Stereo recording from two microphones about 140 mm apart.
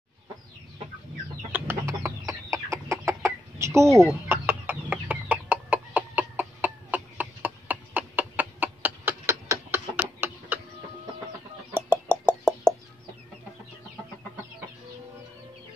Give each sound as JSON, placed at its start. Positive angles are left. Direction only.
{"t": 1.5, "sound": "chicken", "side_deg": -20}
{"t": 11.7, "sound": "knock", "side_deg": -15}